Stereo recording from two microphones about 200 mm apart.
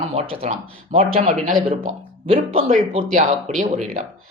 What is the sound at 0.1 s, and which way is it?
Speech, 30° right (ahead or behind).